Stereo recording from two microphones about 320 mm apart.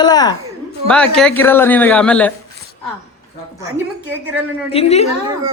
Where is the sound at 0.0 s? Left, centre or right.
Centre.